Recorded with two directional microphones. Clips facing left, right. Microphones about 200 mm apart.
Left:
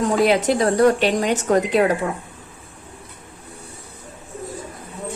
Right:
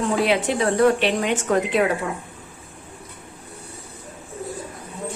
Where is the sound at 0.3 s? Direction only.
40° left (ahead or behind).